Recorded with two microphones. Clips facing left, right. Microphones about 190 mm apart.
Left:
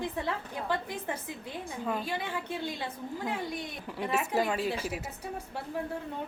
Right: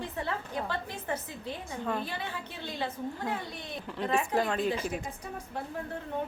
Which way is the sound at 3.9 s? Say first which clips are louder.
Right 1 dB; 10° left (ahead or behind).